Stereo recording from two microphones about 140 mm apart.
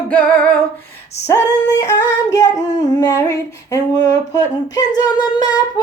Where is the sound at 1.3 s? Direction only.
25° left (ahead or behind).